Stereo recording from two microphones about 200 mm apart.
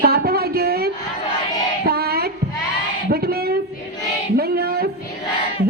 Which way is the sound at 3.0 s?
50° right (ahead or behind).